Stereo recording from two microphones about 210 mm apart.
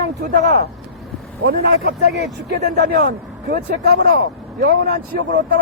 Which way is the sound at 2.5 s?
50° right (ahead or behind).